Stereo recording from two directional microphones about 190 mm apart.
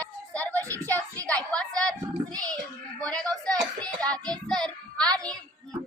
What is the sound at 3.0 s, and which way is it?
A woman's voice, 5° left (ahead or behind).